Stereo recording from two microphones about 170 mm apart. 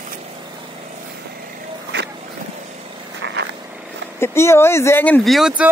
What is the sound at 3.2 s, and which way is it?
Vehicle, 90° right.